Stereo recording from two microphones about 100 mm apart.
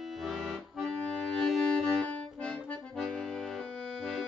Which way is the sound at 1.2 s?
5° left (ahead or behind).